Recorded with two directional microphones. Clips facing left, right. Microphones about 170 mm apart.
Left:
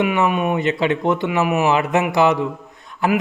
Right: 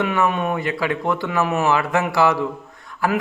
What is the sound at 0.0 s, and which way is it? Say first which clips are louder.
A man's voice: left 2 dB; 15° left (ahead or behind).